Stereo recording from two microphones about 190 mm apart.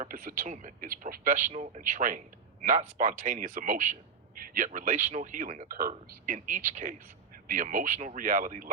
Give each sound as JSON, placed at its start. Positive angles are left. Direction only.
{"t": 0.0, "sound": "speech", "side_deg": -50}